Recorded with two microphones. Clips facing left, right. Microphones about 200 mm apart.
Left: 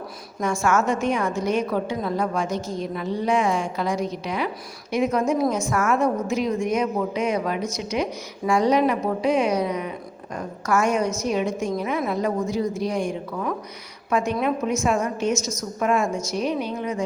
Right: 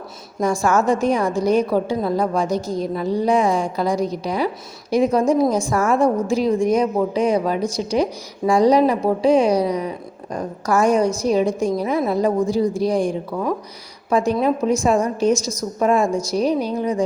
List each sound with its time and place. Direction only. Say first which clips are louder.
0.3 s a woman's voice: right 4 dB; 35° right (ahead or behind)